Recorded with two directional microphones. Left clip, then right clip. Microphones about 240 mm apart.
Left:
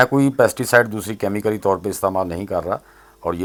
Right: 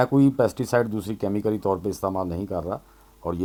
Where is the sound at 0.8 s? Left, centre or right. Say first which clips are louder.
Left 4 dB; left.